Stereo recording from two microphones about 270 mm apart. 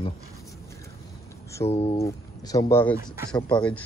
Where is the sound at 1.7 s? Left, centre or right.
Left.